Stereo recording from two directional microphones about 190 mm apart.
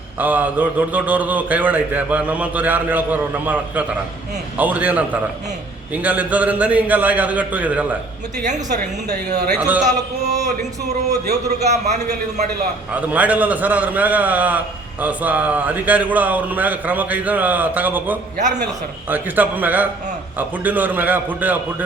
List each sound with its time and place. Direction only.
0.2 s a man's voice: 10° right (ahead or behind)
9.6 s a man's voice: 5° right (ahead or behind)
10.8 s speech: 60° right (ahead or behind)
11.6 s speech: 35° right (ahead or behind)
12.9 s a man's voice: 10° right (ahead or behind)
18.3 s speech: 40° right (ahead or behind)
19.0 s a man's voice: 10° right (ahead or behind)